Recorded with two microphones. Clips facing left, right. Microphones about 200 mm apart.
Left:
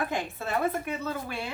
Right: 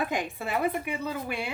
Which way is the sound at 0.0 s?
15° right (ahead or behind).